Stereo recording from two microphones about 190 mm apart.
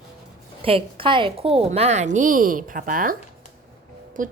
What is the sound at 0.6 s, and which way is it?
A woman's voice, 30° right (ahead or behind).